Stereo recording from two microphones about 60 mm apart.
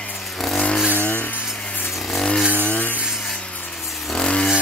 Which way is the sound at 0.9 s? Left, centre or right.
Left.